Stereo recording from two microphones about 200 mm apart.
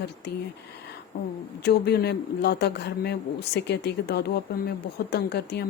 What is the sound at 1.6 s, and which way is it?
Speech, 55° left (ahead or behind).